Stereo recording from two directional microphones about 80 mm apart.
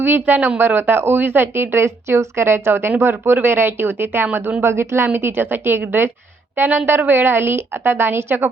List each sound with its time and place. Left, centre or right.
0.0 s speech: right